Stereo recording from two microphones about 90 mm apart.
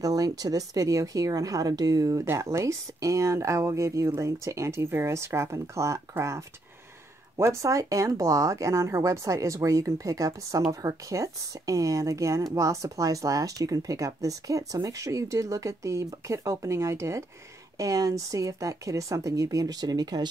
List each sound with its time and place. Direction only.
0.0 s speech: 40° right (ahead or behind)